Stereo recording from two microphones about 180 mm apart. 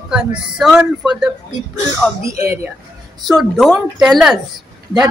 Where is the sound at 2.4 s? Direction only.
15° right (ahead or behind).